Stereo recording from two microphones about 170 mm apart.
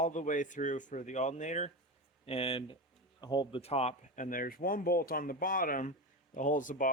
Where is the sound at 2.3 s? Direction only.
35° left (ahead or behind).